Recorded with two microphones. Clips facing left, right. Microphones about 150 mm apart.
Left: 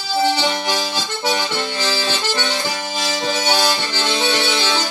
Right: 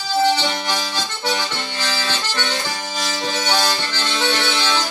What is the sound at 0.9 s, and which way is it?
Music, 10° left (ahead or behind).